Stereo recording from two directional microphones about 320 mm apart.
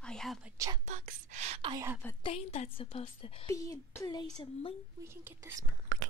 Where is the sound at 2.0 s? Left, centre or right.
Centre.